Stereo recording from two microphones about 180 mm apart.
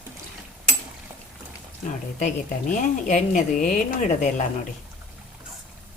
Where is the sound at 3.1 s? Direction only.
45° left (ahead or behind).